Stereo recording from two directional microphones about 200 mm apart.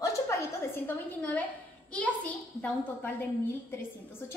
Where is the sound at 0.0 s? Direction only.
15° left (ahead or behind).